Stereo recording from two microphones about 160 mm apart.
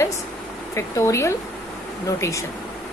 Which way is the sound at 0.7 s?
15° left (ahead or behind).